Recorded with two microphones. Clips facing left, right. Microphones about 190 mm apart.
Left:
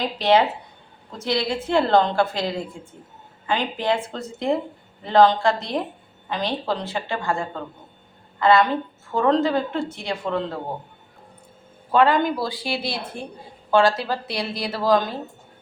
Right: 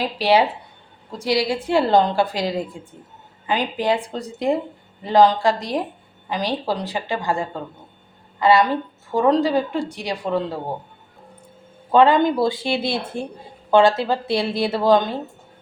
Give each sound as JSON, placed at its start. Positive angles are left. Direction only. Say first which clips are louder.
{"t": 0.0, "sound": "a woman's voice", "louder": "right 1 dB", "side_deg": -10}
{"t": 11.9, "sound": "a woman's voice", "louder": "right 3 dB", "side_deg": -25}